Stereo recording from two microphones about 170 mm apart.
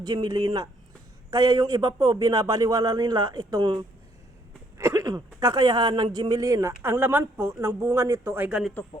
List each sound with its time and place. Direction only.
0.0 s a man's voice: 25° right (ahead or behind); by 8.7 s 5° right (ahead or behind)